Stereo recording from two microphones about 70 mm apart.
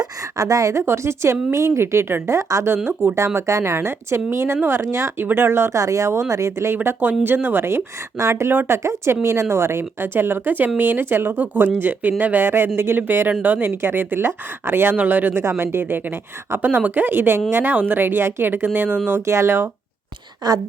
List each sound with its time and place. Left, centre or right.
0.3 s speech: right
6.8 s speech: right
19.0 s speech: right
20.4 s speech: right